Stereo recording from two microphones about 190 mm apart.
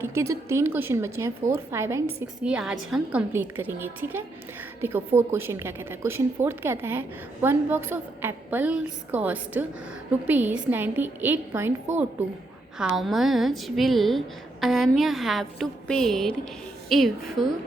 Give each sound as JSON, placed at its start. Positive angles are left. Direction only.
{"t": 0.0, "sound": "a woman's voice", "side_deg": -15}
{"t": 2.4, "sound": "a woman's voice", "side_deg": -5}
{"t": 12.8, "sound": "a woman's voice", "side_deg": 0}